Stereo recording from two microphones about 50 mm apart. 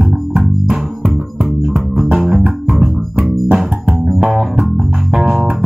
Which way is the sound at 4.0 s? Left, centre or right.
Centre.